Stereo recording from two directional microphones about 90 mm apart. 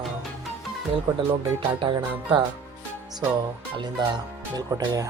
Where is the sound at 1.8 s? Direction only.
60° right (ahead or behind).